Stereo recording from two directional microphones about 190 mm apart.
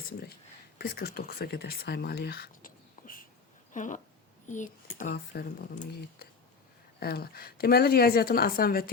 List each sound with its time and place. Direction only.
0.8 s a woman's voice: 55° left (ahead or behind)